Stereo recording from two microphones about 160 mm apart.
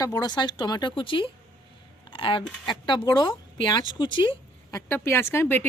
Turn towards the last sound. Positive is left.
turn(degrees=15)  # may be behind; listen again after turning